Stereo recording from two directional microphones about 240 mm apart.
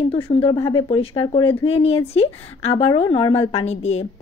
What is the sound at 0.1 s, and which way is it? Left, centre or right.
A woman's voice, left.